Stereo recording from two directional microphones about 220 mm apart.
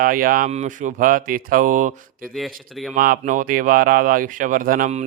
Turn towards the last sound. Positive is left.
turn(degrees=-35)  # may be behind; listen again after turning